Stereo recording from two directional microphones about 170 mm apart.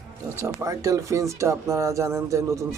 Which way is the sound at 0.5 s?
20° right (ahead or behind).